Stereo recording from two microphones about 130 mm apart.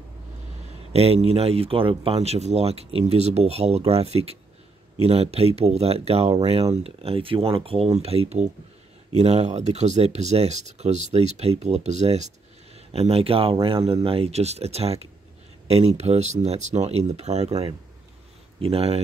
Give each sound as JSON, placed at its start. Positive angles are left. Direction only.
{"t": 0.9, "sound": "speech", "side_deg": -50}
{"t": 18.6, "sound": "speech", "side_deg": -50}